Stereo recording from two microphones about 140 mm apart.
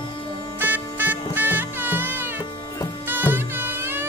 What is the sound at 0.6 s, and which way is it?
Music, 15° right (ahead or behind).